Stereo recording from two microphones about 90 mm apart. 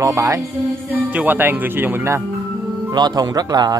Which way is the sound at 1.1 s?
20° right (ahead or behind).